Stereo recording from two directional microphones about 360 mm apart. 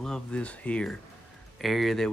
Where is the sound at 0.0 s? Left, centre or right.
Centre.